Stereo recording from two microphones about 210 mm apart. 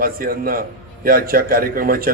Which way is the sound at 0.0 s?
45° right (ahead or behind).